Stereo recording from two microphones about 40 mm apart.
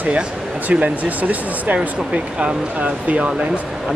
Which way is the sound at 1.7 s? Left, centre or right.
Right.